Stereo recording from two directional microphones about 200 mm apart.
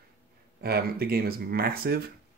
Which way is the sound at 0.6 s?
50° right (ahead or behind).